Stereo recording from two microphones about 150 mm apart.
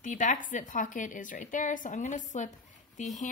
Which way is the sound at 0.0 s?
55° left (ahead or behind).